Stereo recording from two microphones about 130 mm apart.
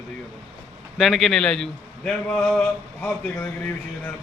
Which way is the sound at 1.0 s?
Centre (ahead or behind).